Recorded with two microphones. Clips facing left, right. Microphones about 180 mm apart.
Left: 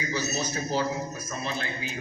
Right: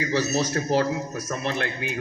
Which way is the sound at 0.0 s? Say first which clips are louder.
Right 6 dB; 75° right (ahead or behind).